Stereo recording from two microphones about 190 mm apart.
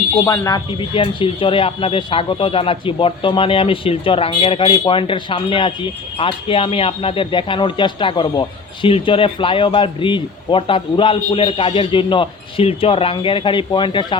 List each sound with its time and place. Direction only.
0.3 s speech: 20° left (ahead or behind)